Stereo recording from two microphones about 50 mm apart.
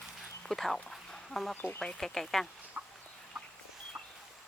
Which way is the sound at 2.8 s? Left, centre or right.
Right.